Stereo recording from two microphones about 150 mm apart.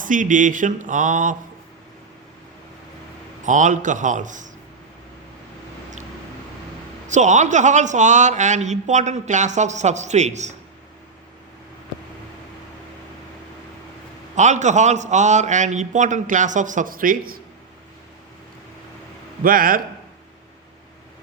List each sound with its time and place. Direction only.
0.0 s speech: 60° right (ahead or behind)
3.4 s speech: 55° right (ahead or behind)
7.1 s a man's voice: 55° right (ahead or behind)
14.3 s a man's voice: 50° right (ahead or behind); by 17.4 s 70° right (ahead or behind)
19.4 s a man's voice: 70° right (ahead or behind)